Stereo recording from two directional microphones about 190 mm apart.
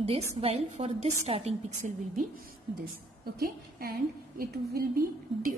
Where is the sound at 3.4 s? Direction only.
55° right (ahead or behind).